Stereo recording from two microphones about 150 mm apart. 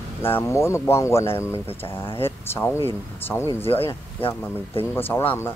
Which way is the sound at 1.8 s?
40° left (ahead or behind).